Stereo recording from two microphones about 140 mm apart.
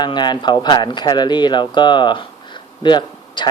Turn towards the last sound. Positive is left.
turn(degrees=35)  # may be behind; listen again after turning